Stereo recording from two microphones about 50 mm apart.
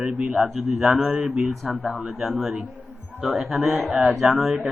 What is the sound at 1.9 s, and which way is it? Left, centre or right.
Speech, right.